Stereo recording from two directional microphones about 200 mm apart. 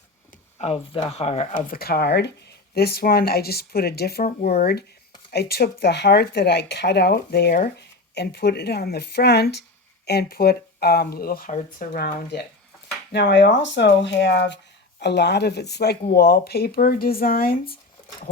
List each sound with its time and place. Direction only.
0.6 s speech: 30° left (ahead or behind); by 4.3 s 50° left (ahead or behind)
5.3 s speech: 55° left (ahead or behind)